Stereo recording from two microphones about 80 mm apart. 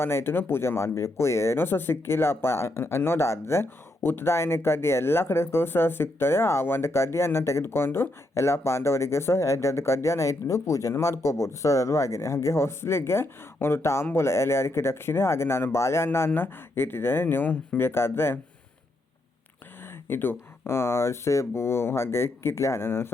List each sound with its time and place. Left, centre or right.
0.0 s speech: left
19.8 s speech: left